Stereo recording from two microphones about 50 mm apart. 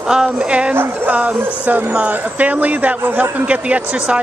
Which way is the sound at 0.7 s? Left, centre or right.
Right.